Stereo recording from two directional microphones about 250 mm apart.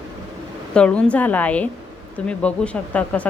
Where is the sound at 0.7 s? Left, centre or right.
Centre.